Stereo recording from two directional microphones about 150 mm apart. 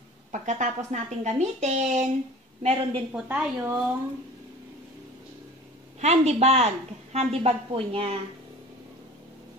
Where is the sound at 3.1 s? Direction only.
10° right (ahead or behind).